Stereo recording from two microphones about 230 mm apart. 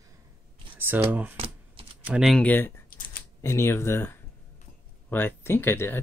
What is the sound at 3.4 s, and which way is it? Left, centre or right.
Speech, centre.